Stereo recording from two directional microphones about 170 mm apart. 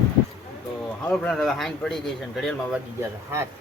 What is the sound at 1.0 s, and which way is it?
Speech, 5° left (ahead or behind).